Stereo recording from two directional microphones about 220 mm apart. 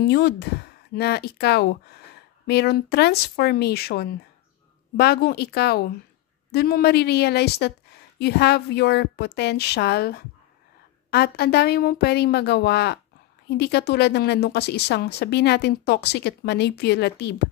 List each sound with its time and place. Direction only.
0.0 s speech: 50° left (ahead or behind)